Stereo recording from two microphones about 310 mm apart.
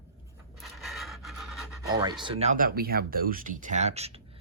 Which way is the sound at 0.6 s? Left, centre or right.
Centre.